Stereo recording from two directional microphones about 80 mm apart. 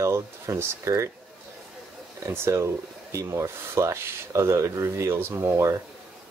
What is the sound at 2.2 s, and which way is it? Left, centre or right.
Speech, right.